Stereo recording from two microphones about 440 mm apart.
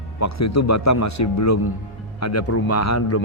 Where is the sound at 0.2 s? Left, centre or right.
Left.